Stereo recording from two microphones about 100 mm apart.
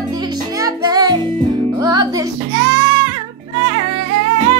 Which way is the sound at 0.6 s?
40° right (ahead or behind).